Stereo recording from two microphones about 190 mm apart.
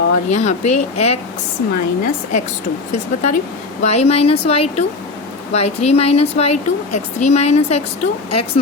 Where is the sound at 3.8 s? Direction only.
35° left (ahead or behind).